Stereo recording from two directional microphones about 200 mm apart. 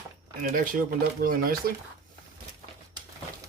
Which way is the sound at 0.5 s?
45° right (ahead or behind).